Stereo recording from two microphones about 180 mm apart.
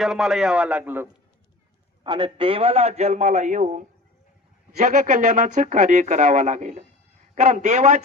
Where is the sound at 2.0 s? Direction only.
25° right (ahead or behind).